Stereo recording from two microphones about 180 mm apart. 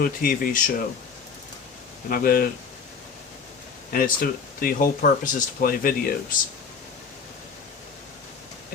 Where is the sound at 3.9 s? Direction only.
55° left (ahead or behind).